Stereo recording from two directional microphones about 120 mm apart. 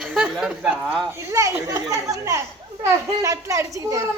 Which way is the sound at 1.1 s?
20° right (ahead or behind).